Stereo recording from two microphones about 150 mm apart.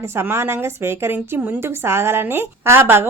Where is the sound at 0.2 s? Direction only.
15° right (ahead or behind).